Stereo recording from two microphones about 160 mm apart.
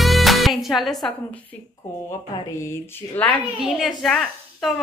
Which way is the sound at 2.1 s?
15° left (ahead or behind).